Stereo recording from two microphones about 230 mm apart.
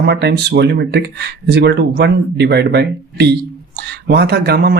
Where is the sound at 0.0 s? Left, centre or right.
Right.